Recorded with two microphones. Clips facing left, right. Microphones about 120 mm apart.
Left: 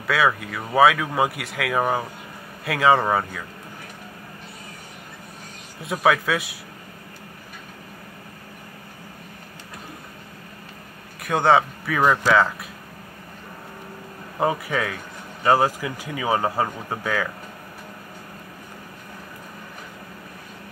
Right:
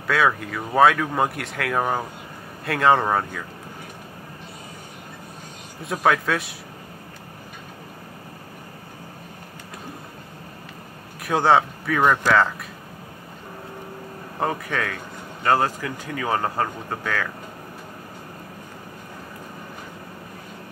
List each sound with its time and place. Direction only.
0.0 s speech: centre (ahead or behind)
5.9 s speech: centre (ahead or behind)
11.1 s speech: centre (ahead or behind)
14.4 s speech: 10° left (ahead or behind)